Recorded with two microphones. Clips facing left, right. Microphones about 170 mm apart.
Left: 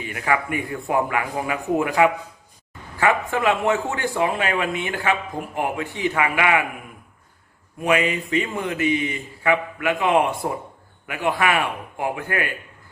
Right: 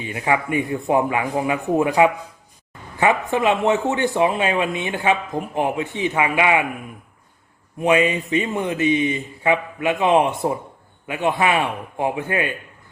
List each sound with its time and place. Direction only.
0.0 s speech: 20° right (ahead or behind)
7.8 s speech: 25° right (ahead or behind)